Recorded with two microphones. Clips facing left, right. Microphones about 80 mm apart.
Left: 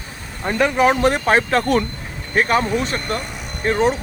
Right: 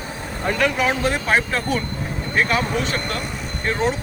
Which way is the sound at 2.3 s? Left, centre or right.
Left.